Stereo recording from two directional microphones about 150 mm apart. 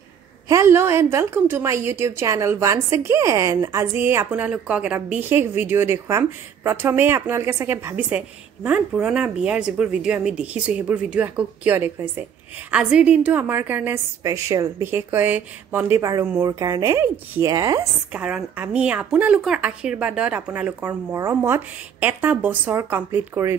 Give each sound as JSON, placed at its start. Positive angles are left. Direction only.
{"t": 0.5, "sound": "a woman's voice", "side_deg": -20}
{"t": 18.1, "sound": "a woman's voice", "side_deg": -10}